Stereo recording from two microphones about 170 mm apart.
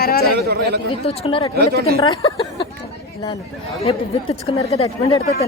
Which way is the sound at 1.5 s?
70° right (ahead or behind).